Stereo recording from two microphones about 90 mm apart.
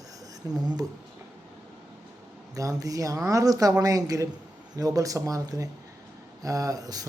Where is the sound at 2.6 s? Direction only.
40° right (ahead or behind).